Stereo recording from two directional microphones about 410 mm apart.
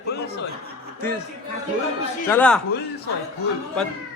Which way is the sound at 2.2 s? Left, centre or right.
Centre.